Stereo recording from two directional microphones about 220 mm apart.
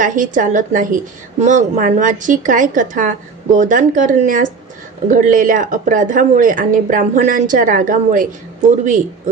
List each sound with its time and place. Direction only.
0.0 s speech: 35° right (ahead or behind)